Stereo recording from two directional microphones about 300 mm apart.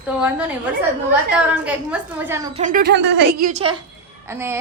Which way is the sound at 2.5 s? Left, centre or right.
Right.